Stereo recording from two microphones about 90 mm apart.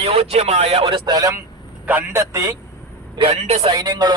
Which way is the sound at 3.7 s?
50° right (ahead or behind).